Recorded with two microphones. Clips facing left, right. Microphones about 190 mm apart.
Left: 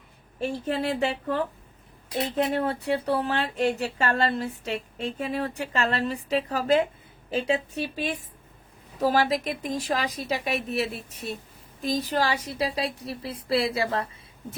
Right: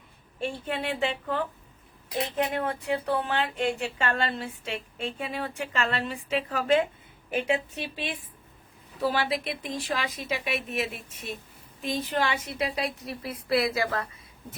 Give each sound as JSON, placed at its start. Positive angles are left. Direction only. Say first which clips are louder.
{"t": 0.4, "sound": "speech", "louder": "left 4 dB", "side_deg": 40}
{"t": 2.5, "sound": "speech", "louder": "left 3 dB", "side_deg": 35}